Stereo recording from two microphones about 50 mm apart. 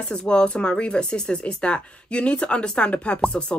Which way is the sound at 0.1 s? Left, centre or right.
Centre.